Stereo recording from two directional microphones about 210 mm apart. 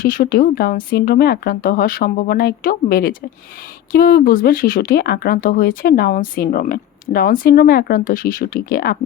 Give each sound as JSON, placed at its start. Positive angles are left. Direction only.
{"t": 0.0, "sound": "speech", "side_deg": 40}